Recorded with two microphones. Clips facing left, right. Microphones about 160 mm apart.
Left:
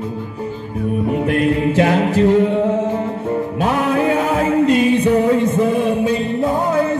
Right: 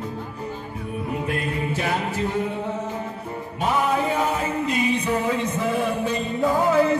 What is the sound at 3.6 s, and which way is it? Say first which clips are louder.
Music: left 4 dB; 90° left.